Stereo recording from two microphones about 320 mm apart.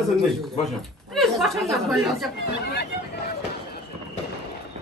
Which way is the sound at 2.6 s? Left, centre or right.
Left.